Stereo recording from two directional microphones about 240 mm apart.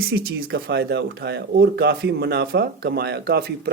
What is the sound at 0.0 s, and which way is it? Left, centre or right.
Speech, right.